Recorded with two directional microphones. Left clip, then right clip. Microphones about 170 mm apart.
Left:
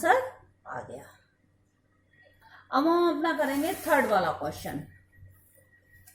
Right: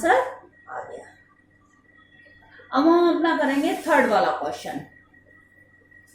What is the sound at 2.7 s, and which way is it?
A woman's voice, 40° left (ahead or behind).